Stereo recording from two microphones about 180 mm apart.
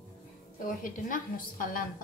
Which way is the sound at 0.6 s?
50° left (ahead or behind).